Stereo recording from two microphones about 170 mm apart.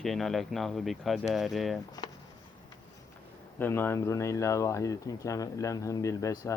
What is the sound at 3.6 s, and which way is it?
Speech, 15° left (ahead or behind).